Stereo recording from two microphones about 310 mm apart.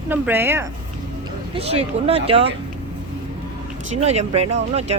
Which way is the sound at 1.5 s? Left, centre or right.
Centre.